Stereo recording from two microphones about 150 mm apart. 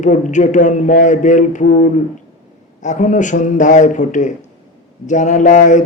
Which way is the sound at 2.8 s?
55° left (ahead or behind).